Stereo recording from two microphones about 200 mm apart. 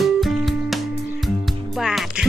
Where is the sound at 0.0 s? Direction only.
Centre (ahead or behind).